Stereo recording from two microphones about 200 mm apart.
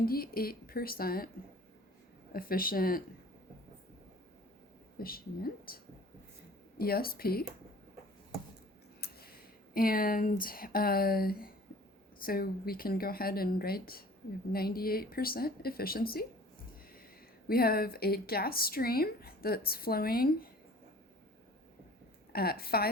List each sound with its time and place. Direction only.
0.0 s a woman's voice: 50° left (ahead or behind)
2.3 s a woman's voice: 45° left (ahead or behind)
4.9 s a woman's voice: 50° left (ahead or behind)
9.0 s a sound: 50° left (ahead or behind)
9.7 s a woman's voice: 45° left (ahead or behind)
17.5 s a woman's voice: 50° left (ahead or behind)
22.3 s a woman's voice: 50° left (ahead or behind)